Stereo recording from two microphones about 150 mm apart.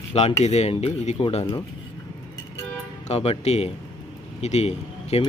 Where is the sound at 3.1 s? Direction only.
45° left (ahead or behind).